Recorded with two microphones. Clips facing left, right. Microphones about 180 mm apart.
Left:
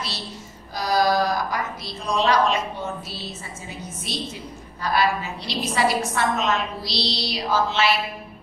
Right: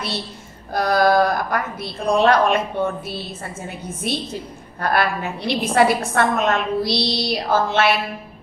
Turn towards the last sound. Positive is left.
turn(degrees=-55)  # may be behind; listen again after turning